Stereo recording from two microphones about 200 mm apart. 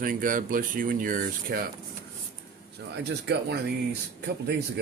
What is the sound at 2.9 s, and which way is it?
Speech, 55° right (ahead or behind).